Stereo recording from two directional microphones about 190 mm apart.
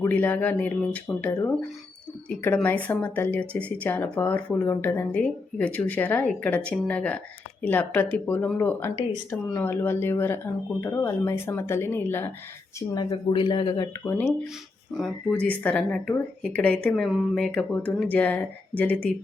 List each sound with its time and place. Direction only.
0.0 s speech: 10° left (ahead or behind)
12.9 s speech: 25° left (ahead or behind); by 19.0 s 10° left (ahead or behind)